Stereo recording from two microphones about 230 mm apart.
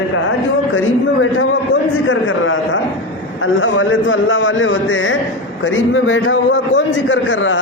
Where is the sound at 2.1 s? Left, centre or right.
Left.